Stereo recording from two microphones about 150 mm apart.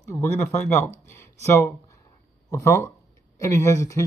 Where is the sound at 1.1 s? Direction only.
15° left (ahead or behind).